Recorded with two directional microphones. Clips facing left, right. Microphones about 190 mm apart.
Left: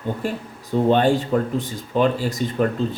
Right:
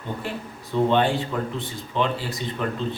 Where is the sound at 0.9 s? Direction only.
45° left (ahead or behind).